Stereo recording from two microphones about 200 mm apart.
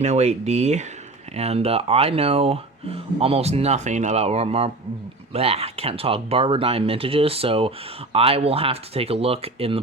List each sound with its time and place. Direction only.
0.0 s speech: 35° right (ahead or behind)